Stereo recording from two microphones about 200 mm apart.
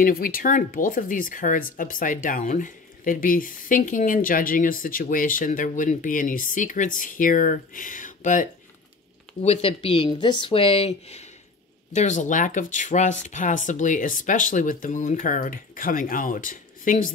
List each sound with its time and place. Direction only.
0.0 s speech: 45° left (ahead or behind)